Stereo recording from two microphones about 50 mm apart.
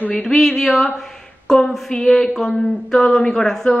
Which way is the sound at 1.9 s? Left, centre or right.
Centre.